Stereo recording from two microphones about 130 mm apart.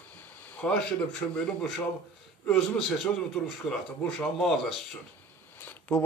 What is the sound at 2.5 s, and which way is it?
Speech, 5° left (ahead or behind).